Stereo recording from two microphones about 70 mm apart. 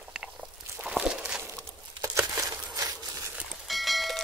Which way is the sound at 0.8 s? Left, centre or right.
Centre.